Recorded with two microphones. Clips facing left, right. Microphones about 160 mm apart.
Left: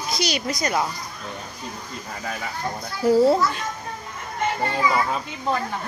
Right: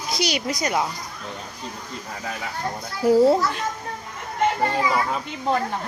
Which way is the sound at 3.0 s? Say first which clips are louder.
Right 1 dB; 15° right (ahead or behind).